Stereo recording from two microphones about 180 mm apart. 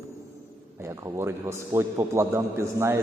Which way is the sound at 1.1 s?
15° right (ahead or behind).